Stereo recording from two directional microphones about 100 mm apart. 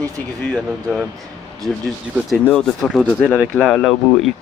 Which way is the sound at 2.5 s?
Centre (ahead or behind).